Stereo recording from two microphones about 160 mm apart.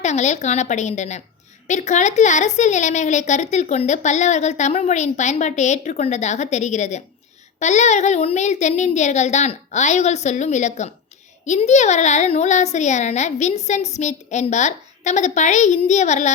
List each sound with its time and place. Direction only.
0.0 s a woman's voice: 45° left (ahead or behind)